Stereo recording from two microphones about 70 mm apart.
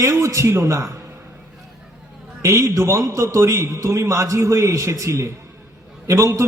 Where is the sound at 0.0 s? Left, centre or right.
Right.